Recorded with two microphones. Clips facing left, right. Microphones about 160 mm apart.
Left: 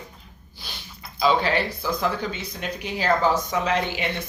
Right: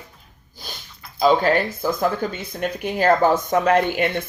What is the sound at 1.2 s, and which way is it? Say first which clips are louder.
Speech: right 4 dB; 45° right (ahead or behind).